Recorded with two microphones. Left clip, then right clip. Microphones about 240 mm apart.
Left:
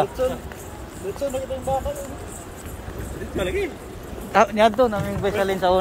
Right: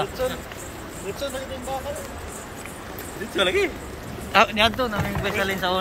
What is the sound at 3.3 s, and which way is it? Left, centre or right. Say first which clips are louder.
A man's voice: right 4 dB; centre.